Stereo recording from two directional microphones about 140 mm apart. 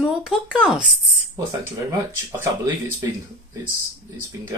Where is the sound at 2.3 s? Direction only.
20° right (ahead or behind).